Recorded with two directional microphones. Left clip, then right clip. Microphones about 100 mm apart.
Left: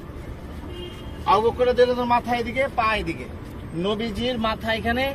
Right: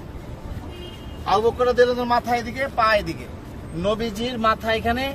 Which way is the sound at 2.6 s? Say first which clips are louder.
Right 3 dB; 40° right (ahead or behind).